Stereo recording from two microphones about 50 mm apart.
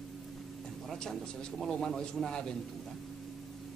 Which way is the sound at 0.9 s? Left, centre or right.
Centre.